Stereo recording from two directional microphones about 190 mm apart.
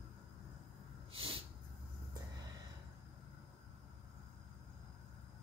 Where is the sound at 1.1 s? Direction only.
30° right (ahead or behind).